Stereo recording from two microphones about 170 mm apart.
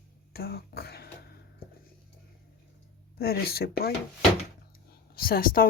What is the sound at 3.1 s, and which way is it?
Speech, 65° left (ahead or behind).